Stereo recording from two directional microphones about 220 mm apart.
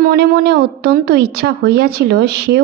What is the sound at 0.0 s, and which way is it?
A woman's voice, 45° right (ahead or behind).